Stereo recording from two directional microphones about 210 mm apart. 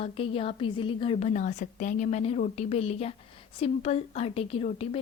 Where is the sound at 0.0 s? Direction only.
25° left (ahead or behind).